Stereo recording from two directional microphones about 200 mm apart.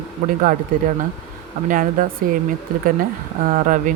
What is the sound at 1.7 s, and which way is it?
Speech, 40° right (ahead or behind).